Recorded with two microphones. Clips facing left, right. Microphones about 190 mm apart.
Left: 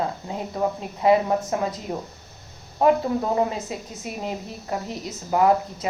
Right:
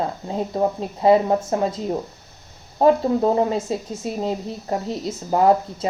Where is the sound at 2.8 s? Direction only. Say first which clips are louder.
Right 3 dB; 30° right (ahead or behind).